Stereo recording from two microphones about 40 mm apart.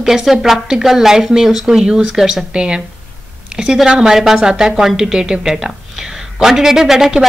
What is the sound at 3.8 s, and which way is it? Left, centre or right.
A woman's voice, centre.